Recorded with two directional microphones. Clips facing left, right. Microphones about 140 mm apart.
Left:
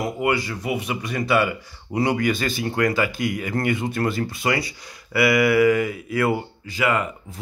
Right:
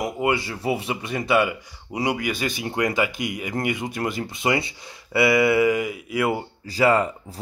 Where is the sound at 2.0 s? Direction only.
10° right (ahead or behind).